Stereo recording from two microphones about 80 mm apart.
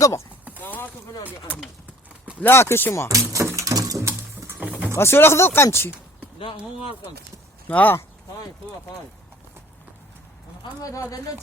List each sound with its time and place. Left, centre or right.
0.6 s a sound: left
2.4 s speech: left
3.1 s a sound: right
4.6 s vehicle: centre
4.9 s speech: left
7.7 s speech: left
10.6 s speech: left